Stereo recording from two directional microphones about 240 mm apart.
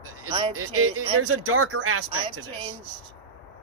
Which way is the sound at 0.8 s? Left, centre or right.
Right.